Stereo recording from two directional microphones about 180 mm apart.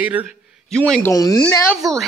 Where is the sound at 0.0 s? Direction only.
10° right (ahead or behind).